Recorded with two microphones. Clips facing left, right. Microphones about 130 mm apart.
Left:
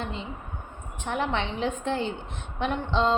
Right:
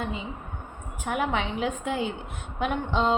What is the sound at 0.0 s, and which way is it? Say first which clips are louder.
A woman's voice: right 2 dB; 5° right (ahead or behind).